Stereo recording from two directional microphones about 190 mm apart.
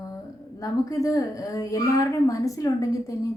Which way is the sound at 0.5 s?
20° left (ahead or behind).